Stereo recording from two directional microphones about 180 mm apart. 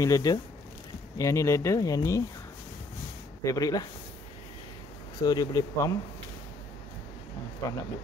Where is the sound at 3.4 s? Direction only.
20° left (ahead or behind).